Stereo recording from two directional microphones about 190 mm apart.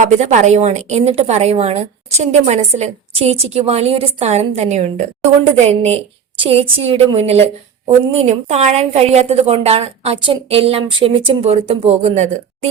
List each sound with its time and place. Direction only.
0.0 s a woman's voice: 40° right (ahead or behind)